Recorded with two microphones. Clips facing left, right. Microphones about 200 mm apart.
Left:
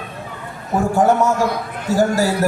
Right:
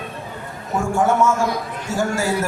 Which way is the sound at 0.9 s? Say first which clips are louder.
Left 2 dB; 35° left (ahead or behind).